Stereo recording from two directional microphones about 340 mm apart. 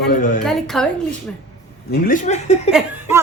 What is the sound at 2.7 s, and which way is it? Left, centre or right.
Speech, centre.